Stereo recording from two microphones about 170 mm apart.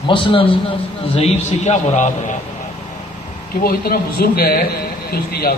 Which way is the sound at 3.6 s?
60° left (ahead or behind).